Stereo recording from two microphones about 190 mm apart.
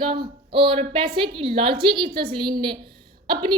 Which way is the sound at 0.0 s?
25° right (ahead or behind).